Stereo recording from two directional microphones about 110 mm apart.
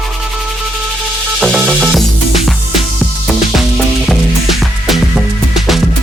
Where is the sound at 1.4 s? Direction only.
5° left (ahead or behind).